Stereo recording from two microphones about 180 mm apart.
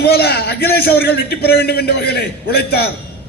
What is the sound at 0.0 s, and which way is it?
A man's voice, 60° left (ahead or behind).